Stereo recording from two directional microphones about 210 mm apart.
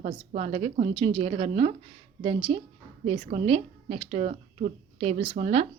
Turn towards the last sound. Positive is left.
turn(degrees=-30)  # may be behind; listen again after turning